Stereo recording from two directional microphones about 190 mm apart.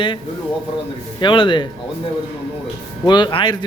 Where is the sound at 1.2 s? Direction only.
25° left (ahead or behind).